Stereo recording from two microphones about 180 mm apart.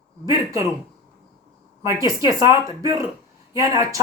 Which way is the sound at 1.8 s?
15° right (ahead or behind).